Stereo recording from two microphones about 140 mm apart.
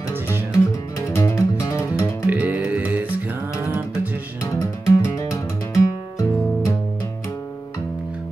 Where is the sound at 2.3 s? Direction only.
10° right (ahead or behind).